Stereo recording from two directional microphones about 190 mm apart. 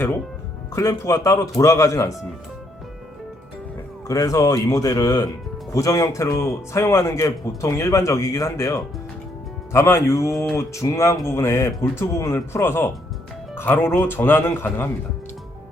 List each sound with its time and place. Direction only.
0.7 s a man's voice: 15° left (ahead or behind)
4.1 s a man's voice: 15° left (ahead or behind)